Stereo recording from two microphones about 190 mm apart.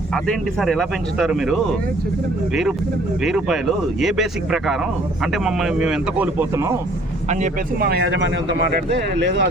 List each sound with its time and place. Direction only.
0.6 s speech: centre (ahead or behind)
3.2 s speech: centre (ahead or behind)
7.8 s speech: 55° right (ahead or behind)